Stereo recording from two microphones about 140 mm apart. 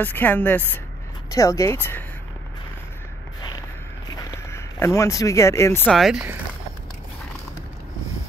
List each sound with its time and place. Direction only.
0.0 s speech: 15° left (ahead or behind)
3.3 s a sound: 30° left (ahead or behind)
5.9 s speech: centre (ahead or behind)